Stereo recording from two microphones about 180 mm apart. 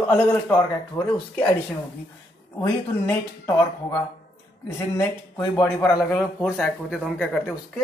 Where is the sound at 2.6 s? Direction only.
10° left (ahead or behind).